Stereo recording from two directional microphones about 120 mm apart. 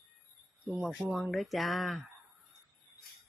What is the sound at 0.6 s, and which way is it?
Speech, 5° right (ahead or behind).